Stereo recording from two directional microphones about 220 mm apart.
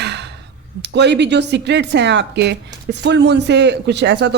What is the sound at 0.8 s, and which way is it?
A woman's voice, 50° right (ahead or behind).